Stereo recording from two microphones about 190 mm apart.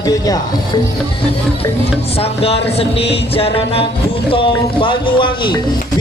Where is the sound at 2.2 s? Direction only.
30° left (ahead or behind).